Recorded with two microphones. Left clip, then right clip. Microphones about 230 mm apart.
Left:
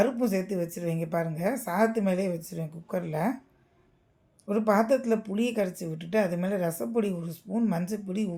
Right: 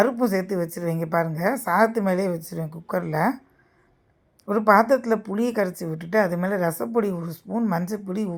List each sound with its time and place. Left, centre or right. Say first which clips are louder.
0.0 s a woman's voice: right 5 dB; centre
4.4 s a woman's voice: right 7 dB; centre